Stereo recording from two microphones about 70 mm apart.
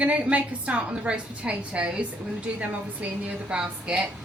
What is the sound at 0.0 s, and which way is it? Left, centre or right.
A woman's voice, centre.